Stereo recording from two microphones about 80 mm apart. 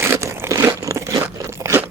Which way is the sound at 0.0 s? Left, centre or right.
Right.